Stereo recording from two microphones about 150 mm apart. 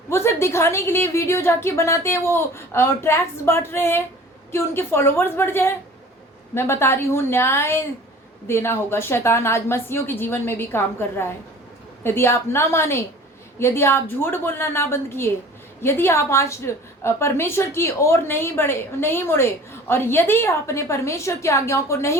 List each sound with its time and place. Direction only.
0.1 s a woman's voice: 15° left (ahead or behind)